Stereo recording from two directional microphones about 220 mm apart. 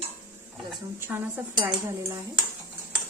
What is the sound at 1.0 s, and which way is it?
A woman's voice, 10° right (ahead or behind).